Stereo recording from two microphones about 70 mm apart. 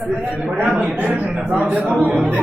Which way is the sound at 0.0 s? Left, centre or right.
Centre.